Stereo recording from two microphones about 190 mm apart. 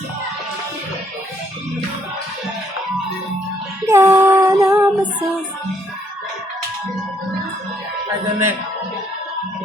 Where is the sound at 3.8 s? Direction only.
15° right (ahead or behind).